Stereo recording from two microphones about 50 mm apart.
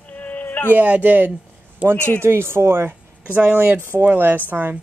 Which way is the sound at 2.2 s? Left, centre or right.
Right.